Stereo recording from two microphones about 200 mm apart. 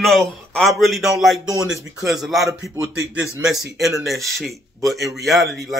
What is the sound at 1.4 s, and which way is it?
Speech, 15° right (ahead or behind).